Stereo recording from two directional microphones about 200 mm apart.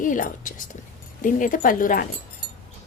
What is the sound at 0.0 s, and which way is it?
Speech, 40° left (ahead or behind).